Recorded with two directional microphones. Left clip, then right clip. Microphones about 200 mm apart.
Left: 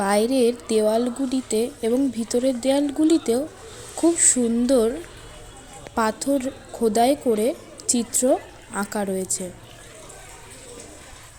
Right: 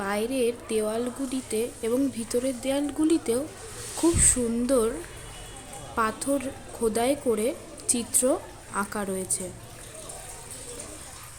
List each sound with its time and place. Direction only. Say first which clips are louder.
0.0 s speech: left 7 dB; 25° left (ahead or behind)
6.0 s a woman's voice: left 4 dB; 15° left (ahead or behind)